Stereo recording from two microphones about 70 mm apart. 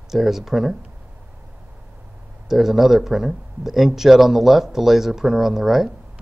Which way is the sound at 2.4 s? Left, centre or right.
Centre.